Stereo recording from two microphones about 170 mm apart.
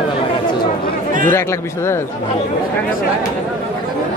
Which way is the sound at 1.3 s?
15° left (ahead or behind).